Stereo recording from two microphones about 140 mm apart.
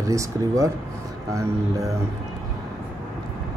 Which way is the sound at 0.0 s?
25° right (ahead or behind).